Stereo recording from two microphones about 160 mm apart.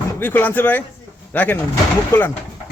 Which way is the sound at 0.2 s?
10° left (ahead or behind).